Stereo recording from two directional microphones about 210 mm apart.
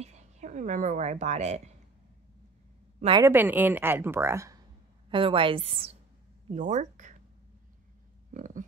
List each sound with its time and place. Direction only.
0.0 s a woman's voice: 35° right (ahead or behind)
3.2 s a woman's voice: 10° right (ahead or behind)
5.1 s a woman's voice: 25° right (ahead or behind)
8.3 s speech: 40° right (ahead or behind)